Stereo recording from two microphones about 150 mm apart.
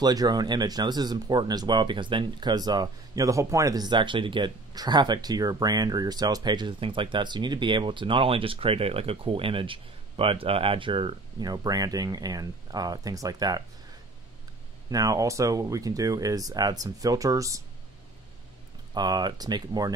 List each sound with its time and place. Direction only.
0.0 s speech: 25° right (ahead or behind)
14.9 s speech: 25° right (ahead or behind)
18.9 s speech: 30° right (ahead or behind)